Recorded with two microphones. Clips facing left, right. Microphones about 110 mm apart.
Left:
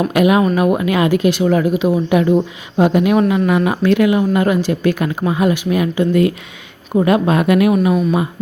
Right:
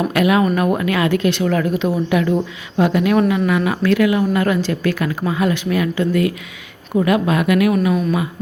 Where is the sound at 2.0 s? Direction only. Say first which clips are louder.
Left 4 dB; 25° left (ahead or behind).